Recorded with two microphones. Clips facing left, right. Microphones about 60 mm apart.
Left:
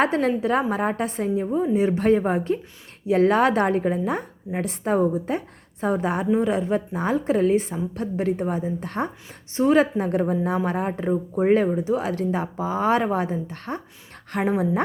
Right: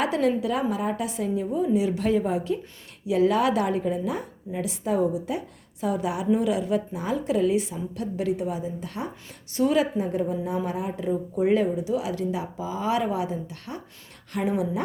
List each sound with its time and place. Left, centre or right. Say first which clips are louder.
0.0 s a woman's voice: left 2 dB; left
9.6 s a woman's voice: left 4 dB; left
9.8 s a woman's voice: left 3 dB; left